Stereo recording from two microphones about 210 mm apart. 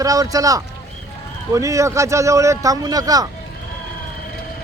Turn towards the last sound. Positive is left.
turn(degrees=-15)  # may be behind; listen again after turning